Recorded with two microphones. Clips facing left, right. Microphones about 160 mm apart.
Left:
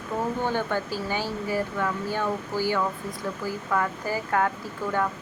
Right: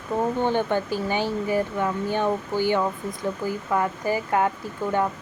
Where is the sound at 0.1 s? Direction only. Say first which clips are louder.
Right 4 dB; 20° right (ahead or behind).